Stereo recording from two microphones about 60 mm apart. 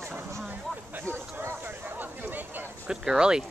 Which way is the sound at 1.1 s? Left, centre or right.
Right.